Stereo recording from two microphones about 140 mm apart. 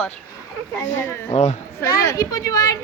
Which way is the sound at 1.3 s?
55° left (ahead or behind).